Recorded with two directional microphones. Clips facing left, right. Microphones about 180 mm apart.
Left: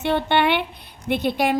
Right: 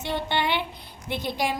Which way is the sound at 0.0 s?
60° left (ahead or behind).